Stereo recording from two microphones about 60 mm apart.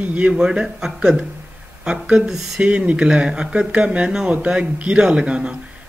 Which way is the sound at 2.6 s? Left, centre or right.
Centre.